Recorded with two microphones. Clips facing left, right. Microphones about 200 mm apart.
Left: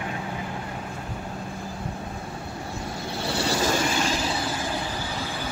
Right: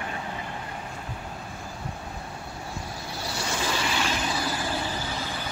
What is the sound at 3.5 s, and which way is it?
Vehicle, 40° left (ahead or behind).